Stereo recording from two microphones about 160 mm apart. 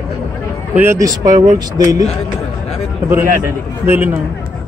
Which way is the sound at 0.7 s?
15° right (ahead or behind).